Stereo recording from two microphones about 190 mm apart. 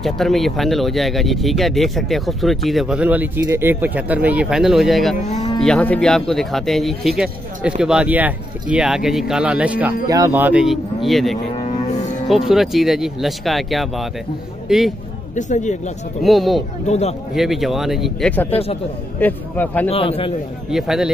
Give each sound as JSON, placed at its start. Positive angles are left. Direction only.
{"t": 0.0, "sound": "speech", "side_deg": 0}
{"t": 5.2, "sound": "speech", "side_deg": 35}
{"t": 5.6, "sound": "speech", "side_deg": 5}
{"t": 11.5, "sound": "cattle", "side_deg": 35}
{"t": 12.3, "sound": "speech", "side_deg": 0}
{"t": 15.3, "sound": "speech", "side_deg": 40}
{"t": 16.2, "sound": "speech", "side_deg": 0}
{"t": 16.8, "sound": "speech", "side_deg": 35}
{"t": 17.3, "sound": "speech", "side_deg": 0}
{"t": 18.5, "sound": "speech", "side_deg": 30}
{"t": 19.1, "sound": "a man's voice", "side_deg": 10}
{"t": 19.9, "sound": "a man's voice", "side_deg": 30}
{"t": 20.7, "sound": "speech", "side_deg": 0}